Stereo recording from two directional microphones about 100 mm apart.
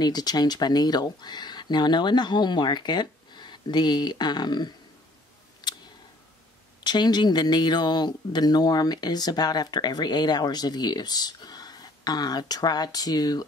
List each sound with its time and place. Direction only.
0.0 s speech: 45° left (ahead or behind)
5.6 s a sound: 45° left (ahead or behind)
6.8 s speech: 45° left (ahead or behind)